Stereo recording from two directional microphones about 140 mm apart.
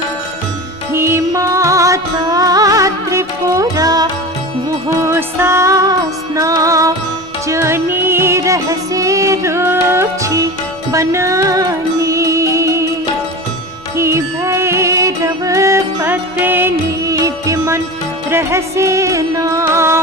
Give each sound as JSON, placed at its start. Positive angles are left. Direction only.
{"t": 0.9, "sound": "music", "side_deg": -20}
{"t": 5.0, "sound": "music", "side_deg": -20}
{"t": 13.9, "sound": "music", "side_deg": -20}